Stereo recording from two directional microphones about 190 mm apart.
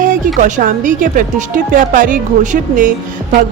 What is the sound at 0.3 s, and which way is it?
A woman's voice, 40° right (ahead or behind).